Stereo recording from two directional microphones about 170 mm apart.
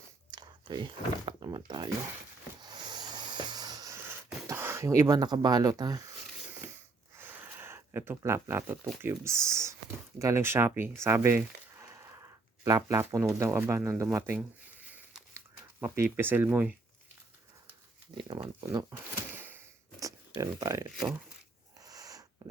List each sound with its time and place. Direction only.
0.3 s speech: 25° right (ahead or behind)
2.7 s a sound: 25° right (ahead or behind)
4.4 s speech: 15° right (ahead or behind)
7.2 s pig: 10° right (ahead or behind)
9.0 s speech: 15° right (ahead or behind)
15.8 s speech: 15° right (ahead or behind)
18.2 s speech: 25° right (ahead or behind)
19.3 s a sound: 10° right (ahead or behind)